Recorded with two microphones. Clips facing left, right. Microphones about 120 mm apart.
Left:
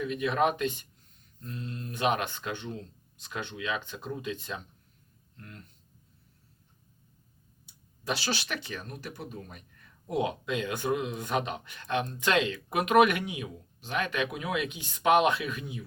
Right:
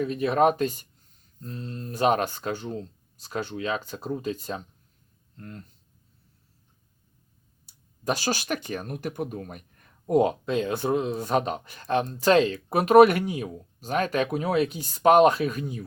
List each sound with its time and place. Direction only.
0.0 s speech: 35° right (ahead or behind)
7.7 s speech: 45° right (ahead or behind)